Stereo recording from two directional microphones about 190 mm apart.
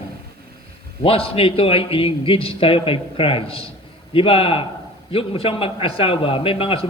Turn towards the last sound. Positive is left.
turn(degrees=30)  # may be behind; listen again after turning